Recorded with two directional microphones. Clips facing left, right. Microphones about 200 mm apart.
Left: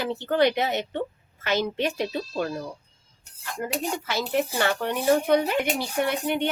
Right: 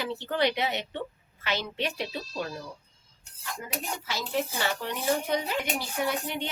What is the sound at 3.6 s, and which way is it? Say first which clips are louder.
Speech: left 8 dB; 60° left (ahead or behind).